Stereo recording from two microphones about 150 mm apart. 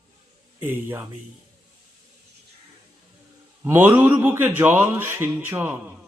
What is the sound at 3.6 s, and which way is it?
A man's voice, 15° right (ahead or behind).